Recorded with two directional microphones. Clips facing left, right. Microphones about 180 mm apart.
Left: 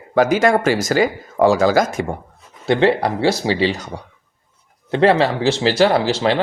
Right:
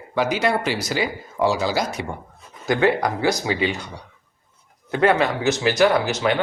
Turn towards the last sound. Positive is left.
turn(degrees=30)  # may be behind; listen again after turning